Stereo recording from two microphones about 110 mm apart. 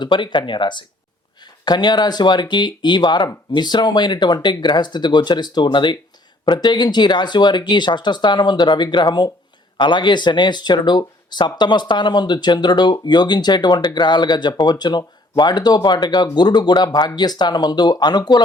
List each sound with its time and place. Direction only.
0.0 s speech: 45° left (ahead or behind)